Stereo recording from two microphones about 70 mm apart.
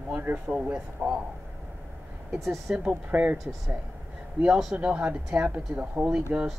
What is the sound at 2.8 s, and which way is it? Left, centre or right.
Speech, centre.